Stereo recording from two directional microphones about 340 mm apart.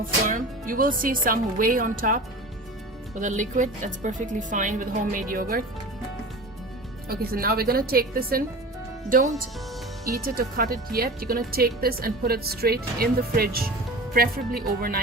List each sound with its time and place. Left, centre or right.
0.0 s speech: right
7.1 s speech: right